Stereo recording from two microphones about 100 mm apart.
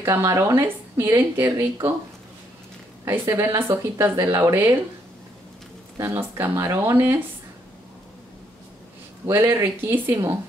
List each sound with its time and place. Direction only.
0.0 s speech: 30° right (ahead or behind)
3.1 s speech: 30° right (ahead or behind)
6.3 s speech: 25° right (ahead or behind)
9.2 s speech: 25° right (ahead or behind)